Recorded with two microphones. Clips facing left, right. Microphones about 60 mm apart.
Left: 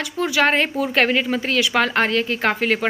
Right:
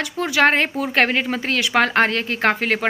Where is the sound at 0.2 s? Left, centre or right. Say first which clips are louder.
Right 1 dB; right.